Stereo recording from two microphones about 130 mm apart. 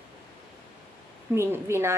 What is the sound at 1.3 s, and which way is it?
Speech, 20° right (ahead or behind).